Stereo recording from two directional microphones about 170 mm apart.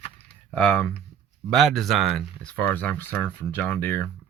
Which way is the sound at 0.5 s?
5° left (ahead or behind).